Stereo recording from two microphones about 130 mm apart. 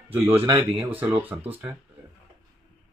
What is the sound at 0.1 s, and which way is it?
Speech, 20° right (ahead or behind).